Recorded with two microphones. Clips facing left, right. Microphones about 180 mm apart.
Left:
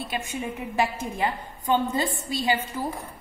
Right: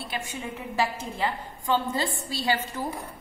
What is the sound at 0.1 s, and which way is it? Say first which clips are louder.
A woman's voice: left 2 dB; 20° left (ahead or behind).